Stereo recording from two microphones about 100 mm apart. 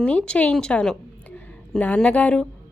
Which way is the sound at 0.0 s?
15° left (ahead or behind).